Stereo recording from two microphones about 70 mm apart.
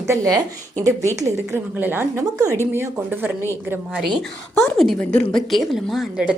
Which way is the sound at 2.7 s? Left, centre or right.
Right.